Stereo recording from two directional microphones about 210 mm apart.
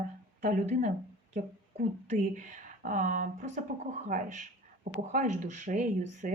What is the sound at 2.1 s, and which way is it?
Speech, 40° right (ahead or behind).